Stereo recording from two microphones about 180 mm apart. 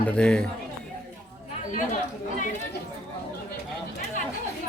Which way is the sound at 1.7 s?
45° left (ahead or behind).